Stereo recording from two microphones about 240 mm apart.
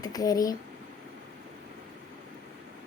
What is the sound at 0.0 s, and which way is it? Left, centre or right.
Speech, centre.